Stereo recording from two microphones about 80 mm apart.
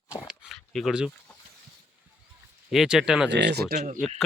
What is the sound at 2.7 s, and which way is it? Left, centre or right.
Speech, centre.